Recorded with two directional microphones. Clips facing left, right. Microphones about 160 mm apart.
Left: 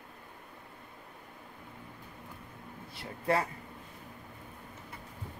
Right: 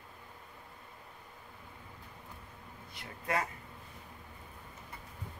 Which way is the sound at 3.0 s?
30° left (ahead or behind).